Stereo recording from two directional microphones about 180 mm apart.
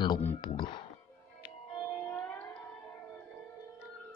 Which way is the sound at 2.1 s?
10° left (ahead or behind).